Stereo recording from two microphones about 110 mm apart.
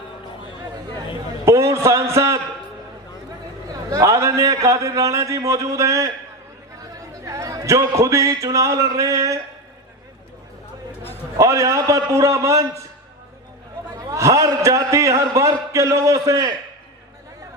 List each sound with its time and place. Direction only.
1.5 s a sound: 25° right (ahead or behind)
3.7 s a man's voice: 30° right (ahead or behind)
7.3 s a man's voice: 30° right (ahead or behind)
11.3 s a man's voice: 30° right (ahead or behind)
14.1 s a man's voice: 30° right (ahead or behind)